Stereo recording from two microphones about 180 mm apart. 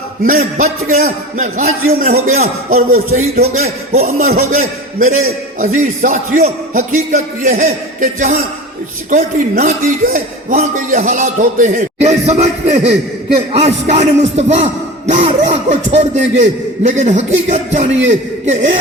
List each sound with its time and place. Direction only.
0.3 s speech: 45° right (ahead or behind)
2.9 s speech: 55° right (ahead or behind)
3.4 s music: 40° right (ahead or behind)
4.4 s speech: 45° right (ahead or behind)
13.5 s music: 35° right (ahead or behind)